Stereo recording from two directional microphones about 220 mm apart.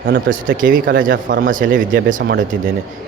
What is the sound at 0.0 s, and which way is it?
A man's voice, 40° right (ahead or behind).